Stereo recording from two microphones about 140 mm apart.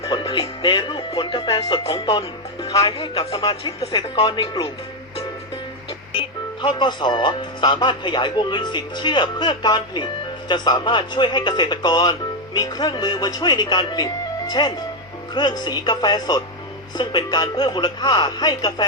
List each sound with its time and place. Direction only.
0.0 s speech: 30° left (ahead or behind)
6.1 s speech: 35° left (ahead or behind)